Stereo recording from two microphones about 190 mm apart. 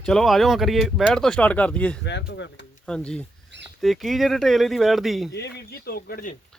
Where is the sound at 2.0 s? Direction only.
65° left (ahead or behind).